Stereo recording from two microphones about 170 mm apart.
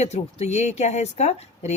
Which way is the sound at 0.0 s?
40° left (ahead or behind).